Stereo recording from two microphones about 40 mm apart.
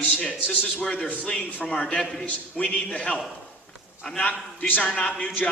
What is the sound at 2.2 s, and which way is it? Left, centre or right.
Speech, left.